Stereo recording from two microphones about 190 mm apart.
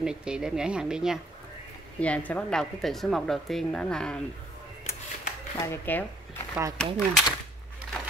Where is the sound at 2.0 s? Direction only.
5° left (ahead or behind).